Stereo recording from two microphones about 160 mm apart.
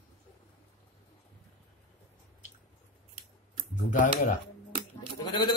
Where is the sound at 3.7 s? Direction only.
55° left (ahead or behind).